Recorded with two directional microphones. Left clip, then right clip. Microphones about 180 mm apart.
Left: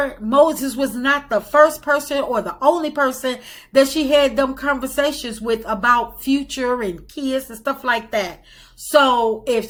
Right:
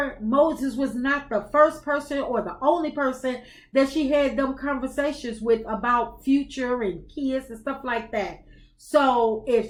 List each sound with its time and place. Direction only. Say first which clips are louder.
0.3 s speech: left 6 dB; 15° left (ahead or behind)